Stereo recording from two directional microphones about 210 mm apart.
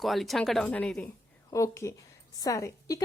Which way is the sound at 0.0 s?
Centre (ahead or behind).